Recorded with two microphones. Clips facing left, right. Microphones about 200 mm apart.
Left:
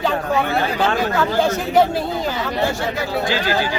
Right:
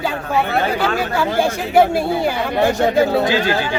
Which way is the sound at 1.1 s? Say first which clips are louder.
Even; 10° right (ahead or behind).